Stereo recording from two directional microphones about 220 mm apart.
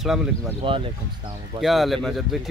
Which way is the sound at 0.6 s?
25° right (ahead or behind).